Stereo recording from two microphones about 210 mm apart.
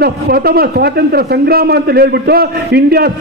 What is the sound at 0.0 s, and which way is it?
A man's voice, 50° right (ahead or behind).